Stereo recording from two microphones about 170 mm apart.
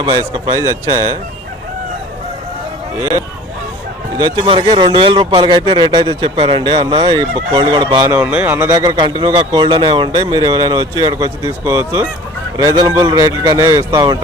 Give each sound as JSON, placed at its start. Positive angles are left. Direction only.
{"t": 0.0, "sound": "speech", "side_deg": -30}
{"t": 0.5, "sound": "speech", "side_deg": -20}
{"t": 4.2, "sound": "speech", "side_deg": -25}
{"t": 8.1, "sound": "speech", "side_deg": -10}